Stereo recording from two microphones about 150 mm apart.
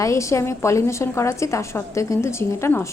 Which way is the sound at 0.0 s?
20° left (ahead or behind).